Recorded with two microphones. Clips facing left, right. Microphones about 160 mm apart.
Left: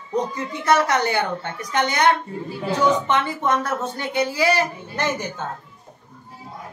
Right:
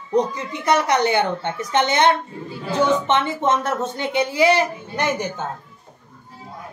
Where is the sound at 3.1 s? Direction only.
25° right (ahead or behind).